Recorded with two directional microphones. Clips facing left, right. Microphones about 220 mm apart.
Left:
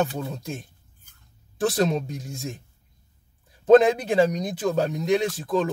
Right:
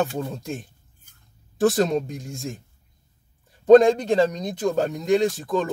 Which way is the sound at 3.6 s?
5° left (ahead or behind).